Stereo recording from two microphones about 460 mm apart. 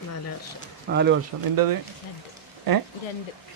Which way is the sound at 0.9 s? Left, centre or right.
Right.